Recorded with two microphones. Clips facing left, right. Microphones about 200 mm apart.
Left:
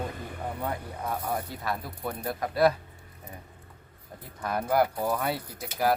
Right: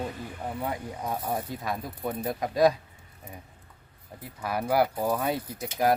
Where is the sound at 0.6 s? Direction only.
10° right (ahead or behind).